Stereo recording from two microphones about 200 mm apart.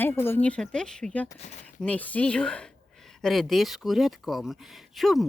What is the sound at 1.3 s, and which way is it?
Speech, 35° left (ahead or behind).